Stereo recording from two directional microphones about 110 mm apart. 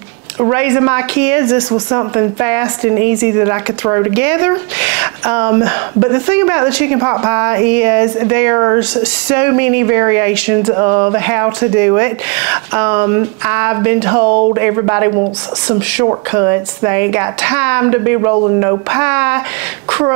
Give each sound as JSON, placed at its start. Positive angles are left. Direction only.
{"t": 0.4, "sound": "speech", "side_deg": -25}
{"t": 8.9, "sound": "speech", "side_deg": -15}
{"t": 16.3, "sound": "speech", "side_deg": -25}